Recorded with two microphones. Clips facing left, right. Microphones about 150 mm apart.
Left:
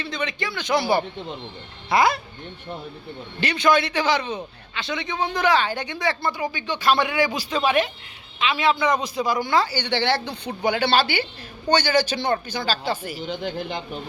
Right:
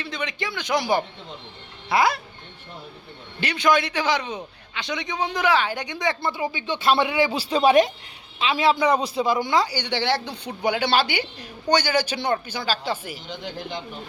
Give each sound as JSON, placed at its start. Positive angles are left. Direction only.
{"t": 0.0, "sound": "speech", "side_deg": -10}
{"t": 3.4, "sound": "a man's voice", "side_deg": -10}